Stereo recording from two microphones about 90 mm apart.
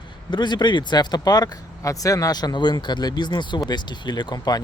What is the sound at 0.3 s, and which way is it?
Speech, 55° left (ahead or behind).